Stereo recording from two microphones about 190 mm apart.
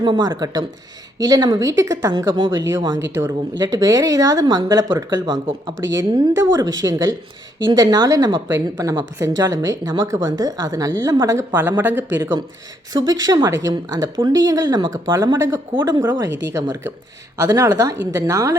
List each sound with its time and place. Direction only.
0.0 s a woman's voice: 20° right (ahead or behind)
12.9 s a woman's voice: 20° right (ahead or behind)